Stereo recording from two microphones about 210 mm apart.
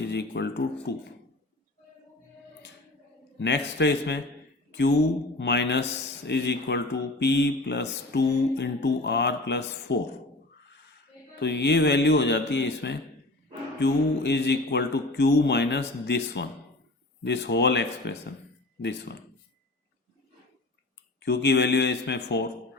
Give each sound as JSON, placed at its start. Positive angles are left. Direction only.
{"t": 0.1, "sound": "speech", "side_deg": 55}
{"t": 3.3, "sound": "speech", "side_deg": 55}
{"t": 11.3, "sound": "speech", "side_deg": 55}
{"t": 21.2, "sound": "speech", "side_deg": 55}